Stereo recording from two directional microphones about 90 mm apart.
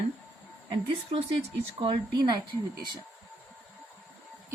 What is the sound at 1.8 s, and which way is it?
Speech, 55° right (ahead or behind).